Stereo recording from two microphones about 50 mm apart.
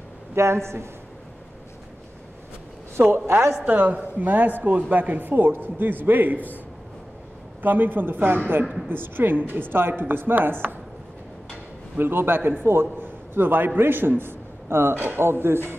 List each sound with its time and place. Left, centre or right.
0.3 s a woman's voice: right
3.5 s speech: right
7.6 s speech: right
12.0 s a man's voice: right
15.0 s speech: right
15.2 s speech: right